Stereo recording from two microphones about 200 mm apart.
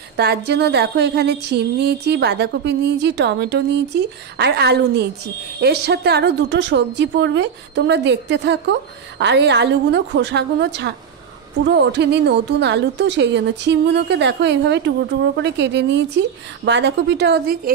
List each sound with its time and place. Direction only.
0.2 s a woman's voice: 55° right (ahead or behind)